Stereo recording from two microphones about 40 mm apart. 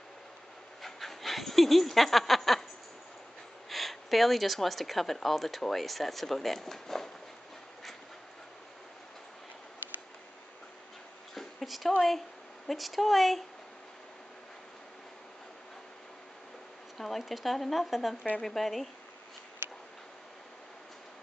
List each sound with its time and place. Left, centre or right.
0.8 s speech: centre
3.6 s speech: centre
11.3 s a sound: centre
12.6 s speech: centre
17.0 s speech: centre
19.6 s tick: right